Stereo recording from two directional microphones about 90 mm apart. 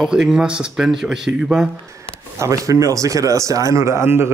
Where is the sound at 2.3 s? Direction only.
35° right (ahead or behind).